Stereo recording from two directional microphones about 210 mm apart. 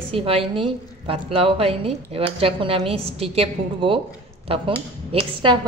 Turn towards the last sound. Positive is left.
turn(degrees=-25)  # may be behind; listen again after turning